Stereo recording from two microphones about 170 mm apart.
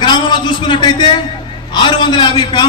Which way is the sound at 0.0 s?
25° left (ahead or behind).